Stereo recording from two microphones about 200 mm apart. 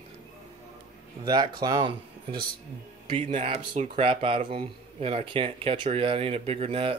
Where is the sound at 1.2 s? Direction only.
20° right (ahead or behind).